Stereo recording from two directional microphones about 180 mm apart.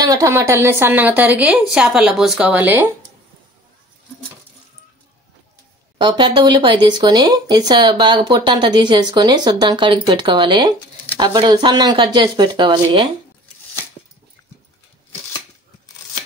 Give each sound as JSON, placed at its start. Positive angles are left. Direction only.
{"t": 0.0, "sound": "a woman's voice", "side_deg": -20}
{"t": 5.9, "sound": "speech", "side_deg": -25}